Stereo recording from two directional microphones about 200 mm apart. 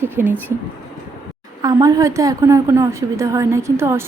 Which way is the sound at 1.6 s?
20° right (ahead or behind).